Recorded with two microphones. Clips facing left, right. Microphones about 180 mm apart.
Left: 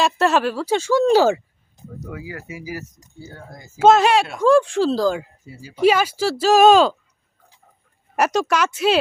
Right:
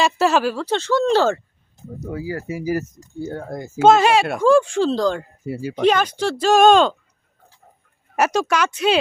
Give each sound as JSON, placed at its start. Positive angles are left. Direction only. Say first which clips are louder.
{"t": 0.0, "sound": "speech", "louder": "even", "side_deg": 0}
{"t": 2.0, "sound": "speech", "louder": "right 7 dB", "side_deg": -35}
{"t": 2.5, "sound": "speech", "louder": "right 10 dB", "side_deg": -45}
{"t": 3.2, "sound": "speech", "louder": "right 11 dB", "side_deg": -55}
{"t": 3.8, "sound": "speech", "louder": "even", "side_deg": 0}
{"t": 5.5, "sound": "speech", "louder": "right 13 dB", "side_deg": -65}
{"t": 5.8, "sound": "speech", "louder": "left 1 dB", "side_deg": 5}
{"t": 8.1, "sound": "speech", "louder": "even", "side_deg": 0}